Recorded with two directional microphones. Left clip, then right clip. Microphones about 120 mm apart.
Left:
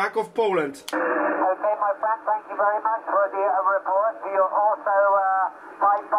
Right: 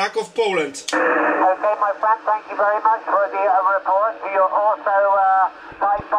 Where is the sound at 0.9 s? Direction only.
55° right (ahead or behind).